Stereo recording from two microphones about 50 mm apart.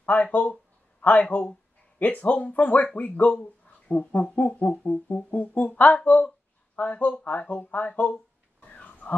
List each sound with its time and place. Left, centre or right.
0.0 s speech: left